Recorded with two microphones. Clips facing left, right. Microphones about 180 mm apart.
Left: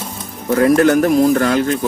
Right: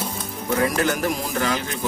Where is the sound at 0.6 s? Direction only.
60° left (ahead or behind).